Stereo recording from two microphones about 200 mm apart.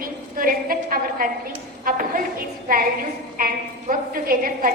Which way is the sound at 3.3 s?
45° right (ahead or behind).